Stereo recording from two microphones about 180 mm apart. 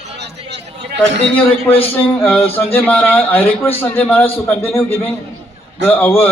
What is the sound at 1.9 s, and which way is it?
A man's voice, 10° left (ahead or behind).